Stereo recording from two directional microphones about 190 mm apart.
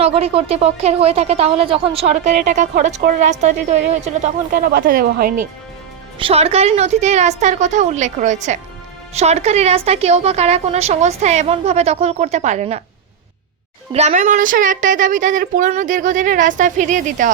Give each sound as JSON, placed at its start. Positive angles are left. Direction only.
{"t": 0.0, "sound": "a woman's voice", "side_deg": -30}
{"t": 4.7, "sound": "speech", "side_deg": -50}
{"t": 6.1, "sound": "a woman's voice", "side_deg": -30}
{"t": 13.9, "sound": "speech", "side_deg": -35}